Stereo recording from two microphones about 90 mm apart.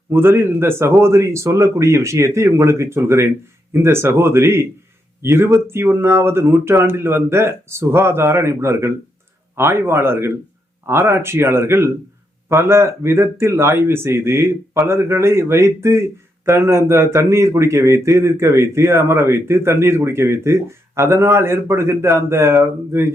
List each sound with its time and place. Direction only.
0.1 s a man's voice: 25° right (ahead or behind)